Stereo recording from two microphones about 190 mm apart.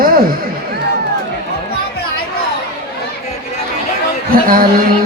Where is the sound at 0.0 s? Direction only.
50° right (ahead or behind).